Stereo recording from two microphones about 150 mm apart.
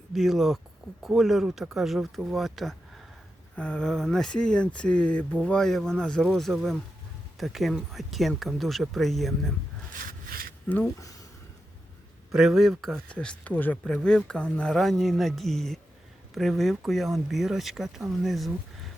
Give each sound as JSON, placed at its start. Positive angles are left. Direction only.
{"t": 0.1, "sound": "speech", "side_deg": 0}
{"t": 9.9, "sound": "rub", "side_deg": -65}
{"t": 10.7, "sound": "speech", "side_deg": 15}
{"t": 12.3, "sound": "speech", "side_deg": 0}